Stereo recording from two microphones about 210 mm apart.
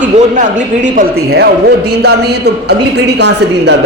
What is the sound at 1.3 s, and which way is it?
A man's voice, 50° right (ahead or behind).